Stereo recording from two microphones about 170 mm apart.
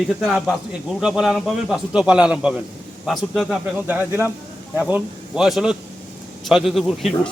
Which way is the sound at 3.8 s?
10° right (ahead or behind).